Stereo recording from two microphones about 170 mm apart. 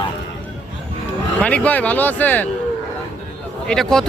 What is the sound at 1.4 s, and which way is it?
Speech, 5° left (ahead or behind).